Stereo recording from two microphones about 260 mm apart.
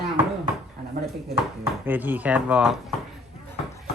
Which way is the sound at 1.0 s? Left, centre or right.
Right.